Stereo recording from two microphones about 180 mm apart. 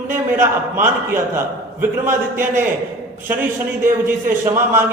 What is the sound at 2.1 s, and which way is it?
Speech, 15° right (ahead or behind).